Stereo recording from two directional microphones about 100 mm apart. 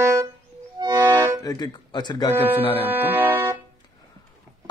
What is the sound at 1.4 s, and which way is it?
Speech, 45° left (ahead or behind).